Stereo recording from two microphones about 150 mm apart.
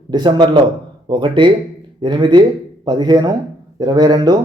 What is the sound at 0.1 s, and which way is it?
A man's voice, 30° right (ahead or behind).